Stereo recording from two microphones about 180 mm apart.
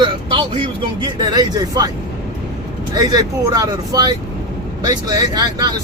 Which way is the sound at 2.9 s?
20° right (ahead or behind).